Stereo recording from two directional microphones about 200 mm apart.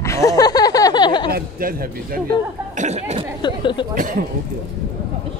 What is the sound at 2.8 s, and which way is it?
Speech, 35° right (ahead or behind).